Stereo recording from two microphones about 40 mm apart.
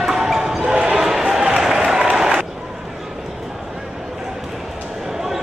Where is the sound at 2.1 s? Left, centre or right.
Centre.